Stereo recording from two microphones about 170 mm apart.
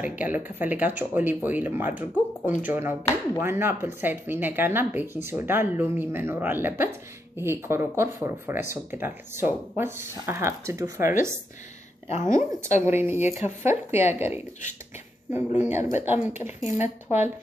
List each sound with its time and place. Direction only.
0.0 s speech: 10° right (ahead or behind)
12.1 s a woman's voice: 45° left (ahead or behind)
12.8 s speech: 15° right (ahead or behind)